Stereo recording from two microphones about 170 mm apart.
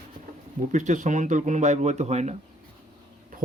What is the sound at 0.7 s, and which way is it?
A man's voice, 45° right (ahead or behind).